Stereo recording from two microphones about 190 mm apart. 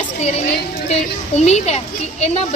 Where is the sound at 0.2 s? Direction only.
35° left (ahead or behind).